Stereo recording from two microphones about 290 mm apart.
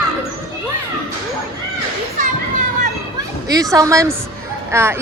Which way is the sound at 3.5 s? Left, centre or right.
Centre.